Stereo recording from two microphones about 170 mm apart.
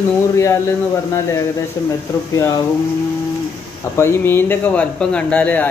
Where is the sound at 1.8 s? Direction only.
15° left (ahead or behind).